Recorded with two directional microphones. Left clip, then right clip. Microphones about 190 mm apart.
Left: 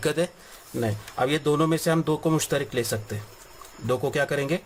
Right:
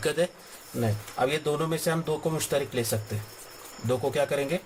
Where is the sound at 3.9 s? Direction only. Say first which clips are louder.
Left 1 dB; 40° left (ahead or behind).